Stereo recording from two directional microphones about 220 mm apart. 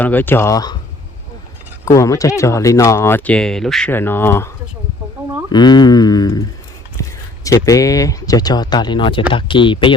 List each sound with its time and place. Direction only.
0.0 s speech: 10° left (ahead or behind)
1.8 s speech: 15° left (ahead or behind)
5.5 s speech: 20° left (ahead or behind)
7.4 s speech: 15° left (ahead or behind)